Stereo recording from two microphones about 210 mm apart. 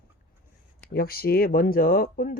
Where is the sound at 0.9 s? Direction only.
45° left (ahead or behind).